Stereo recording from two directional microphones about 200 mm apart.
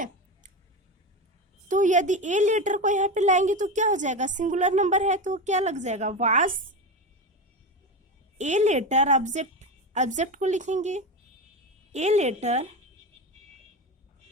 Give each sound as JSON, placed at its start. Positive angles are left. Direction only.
{"t": 1.6, "sound": "a woman's voice", "side_deg": -40}
{"t": 8.4, "sound": "a woman's voice", "side_deg": -35}